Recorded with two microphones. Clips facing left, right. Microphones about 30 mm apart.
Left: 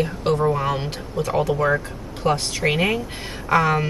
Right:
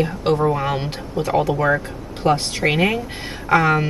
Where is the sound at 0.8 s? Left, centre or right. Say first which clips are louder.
Right 2 dB; right.